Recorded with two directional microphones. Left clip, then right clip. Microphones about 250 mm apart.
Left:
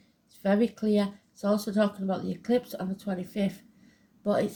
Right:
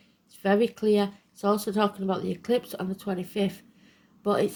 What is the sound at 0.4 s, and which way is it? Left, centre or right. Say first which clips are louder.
Speech: right 3 dB; right.